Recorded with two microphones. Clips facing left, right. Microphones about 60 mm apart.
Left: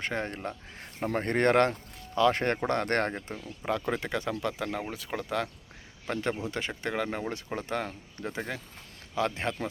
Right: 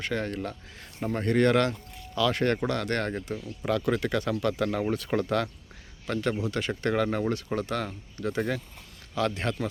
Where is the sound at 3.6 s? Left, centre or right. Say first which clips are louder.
Right 4 dB; left.